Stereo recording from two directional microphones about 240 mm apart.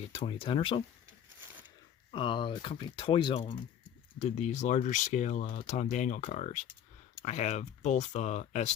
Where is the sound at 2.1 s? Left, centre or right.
Left.